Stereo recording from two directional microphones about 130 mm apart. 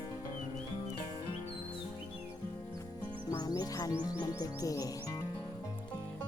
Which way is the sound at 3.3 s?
30° left (ahead or behind).